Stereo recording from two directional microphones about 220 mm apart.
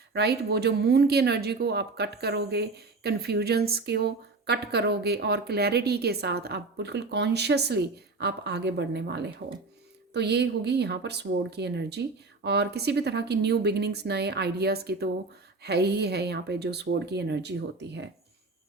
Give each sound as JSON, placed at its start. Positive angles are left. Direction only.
{"t": 0.1, "sound": "speech", "side_deg": -45}